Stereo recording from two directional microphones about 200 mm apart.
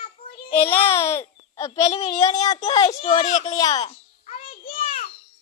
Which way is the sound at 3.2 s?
35° left (ahead or behind).